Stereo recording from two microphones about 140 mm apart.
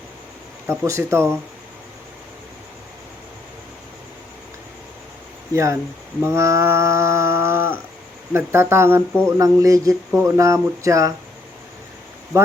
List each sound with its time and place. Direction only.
0.7 s speech: 20° right (ahead or behind)
5.5 s speech: 20° right (ahead or behind)
6.2 s a sound: 20° right (ahead or behind)
8.3 s speech: 20° right (ahead or behind)
12.3 s speech: 20° right (ahead or behind)